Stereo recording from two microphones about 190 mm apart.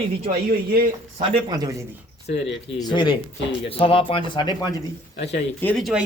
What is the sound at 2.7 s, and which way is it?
Speech, 20° left (ahead or behind).